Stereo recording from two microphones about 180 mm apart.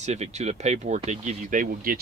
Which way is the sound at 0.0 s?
40° right (ahead or behind).